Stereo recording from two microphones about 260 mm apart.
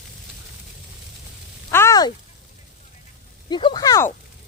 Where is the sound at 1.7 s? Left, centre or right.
Centre.